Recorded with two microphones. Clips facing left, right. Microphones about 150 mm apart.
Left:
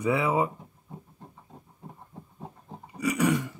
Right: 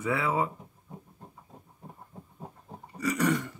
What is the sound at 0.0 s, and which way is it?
Speech, 20° left (ahead or behind).